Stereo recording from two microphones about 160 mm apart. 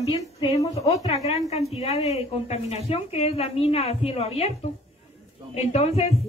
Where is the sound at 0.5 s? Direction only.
20° left (ahead or behind).